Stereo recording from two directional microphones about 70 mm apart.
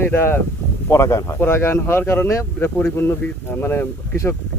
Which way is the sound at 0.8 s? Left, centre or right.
Left.